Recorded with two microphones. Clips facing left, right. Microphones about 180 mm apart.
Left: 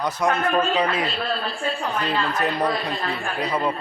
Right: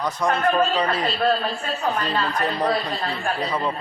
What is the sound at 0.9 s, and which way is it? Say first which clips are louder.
Speech: right 4 dB; 40° right (ahead or behind).